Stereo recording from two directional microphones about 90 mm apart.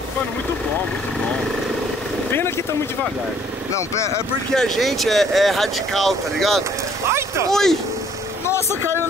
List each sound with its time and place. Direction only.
4.6 s speech: centre (ahead or behind)
7.1 s speech: 30° right (ahead or behind)
7.4 s speech: 5° left (ahead or behind)
8.5 s speech: 30° left (ahead or behind)